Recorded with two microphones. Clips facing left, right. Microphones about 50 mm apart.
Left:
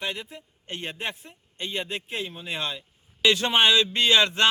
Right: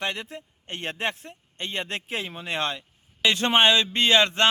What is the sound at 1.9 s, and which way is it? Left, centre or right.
Speech, right.